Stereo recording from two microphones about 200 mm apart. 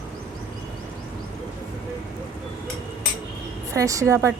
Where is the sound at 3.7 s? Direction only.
15° right (ahead or behind).